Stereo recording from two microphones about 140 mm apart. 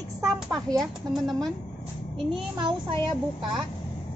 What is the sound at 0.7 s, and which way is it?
Speech, 5° left (ahead or behind).